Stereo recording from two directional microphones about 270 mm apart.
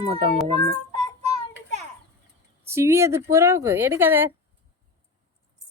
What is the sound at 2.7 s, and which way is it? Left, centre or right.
Speech, centre.